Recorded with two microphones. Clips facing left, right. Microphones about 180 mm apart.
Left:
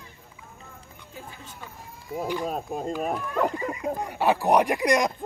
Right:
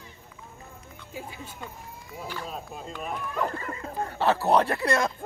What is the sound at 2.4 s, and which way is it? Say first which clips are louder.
Speech: left 8 dB; 50° left (ahead or behind).